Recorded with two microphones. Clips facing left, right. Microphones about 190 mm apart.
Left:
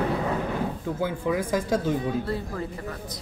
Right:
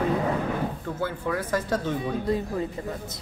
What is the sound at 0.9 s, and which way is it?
Speech, 10° left (ahead or behind).